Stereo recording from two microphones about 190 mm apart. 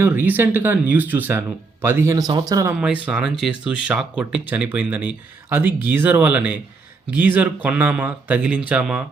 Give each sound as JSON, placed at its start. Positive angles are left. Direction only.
{"t": 0.0, "sound": "speech", "side_deg": -10}
{"t": 2.7, "sound": "speech", "side_deg": -5}